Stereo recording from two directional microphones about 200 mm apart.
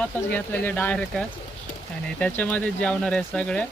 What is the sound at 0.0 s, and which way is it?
Speech, 10° left (ahead or behind).